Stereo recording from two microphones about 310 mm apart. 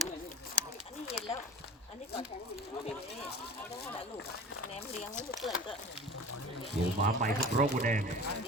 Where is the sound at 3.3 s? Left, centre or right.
Left.